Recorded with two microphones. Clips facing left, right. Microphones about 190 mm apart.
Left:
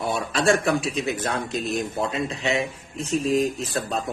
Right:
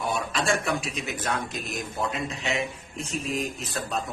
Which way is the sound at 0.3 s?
35° left (ahead or behind).